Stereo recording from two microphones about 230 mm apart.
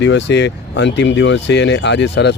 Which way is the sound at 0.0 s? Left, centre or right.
Left.